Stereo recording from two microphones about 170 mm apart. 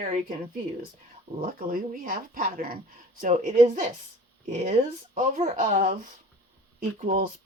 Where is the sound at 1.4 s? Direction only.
55° right (ahead or behind).